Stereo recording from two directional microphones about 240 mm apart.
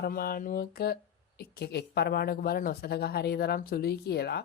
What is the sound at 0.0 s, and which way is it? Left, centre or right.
A woman's voice, left.